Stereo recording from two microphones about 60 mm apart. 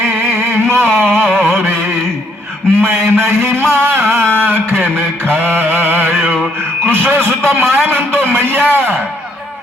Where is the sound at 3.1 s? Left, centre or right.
Right.